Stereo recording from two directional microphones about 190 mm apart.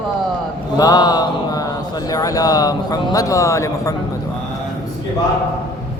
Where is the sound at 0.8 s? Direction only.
20° left (ahead or behind).